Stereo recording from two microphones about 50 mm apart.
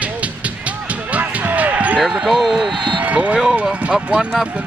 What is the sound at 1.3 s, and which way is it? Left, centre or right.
Basketball bounce, right.